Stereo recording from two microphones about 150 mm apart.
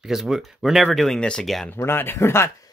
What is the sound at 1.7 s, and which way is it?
Speech, 15° left (ahead or behind).